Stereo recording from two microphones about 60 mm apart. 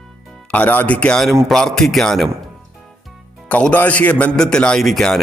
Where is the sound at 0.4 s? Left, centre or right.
Left.